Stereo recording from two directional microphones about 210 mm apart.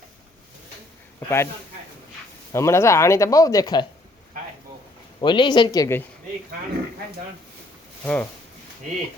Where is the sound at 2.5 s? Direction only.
15° left (ahead or behind).